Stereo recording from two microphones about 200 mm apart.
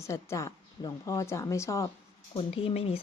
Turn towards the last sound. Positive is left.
turn(degrees=30)  # may be behind; listen again after turning